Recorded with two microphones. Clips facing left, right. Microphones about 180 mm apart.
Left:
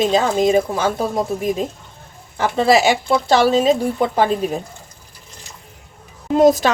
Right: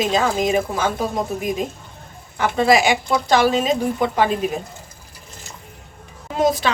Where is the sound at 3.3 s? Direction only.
35° left (ahead or behind).